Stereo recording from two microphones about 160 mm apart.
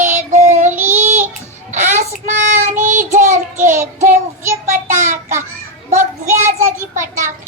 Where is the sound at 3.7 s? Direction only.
15° right (ahead or behind).